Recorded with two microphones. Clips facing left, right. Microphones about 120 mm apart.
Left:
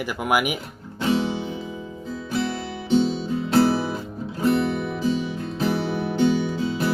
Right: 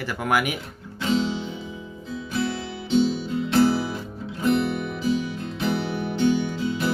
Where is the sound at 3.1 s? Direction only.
35° left (ahead or behind).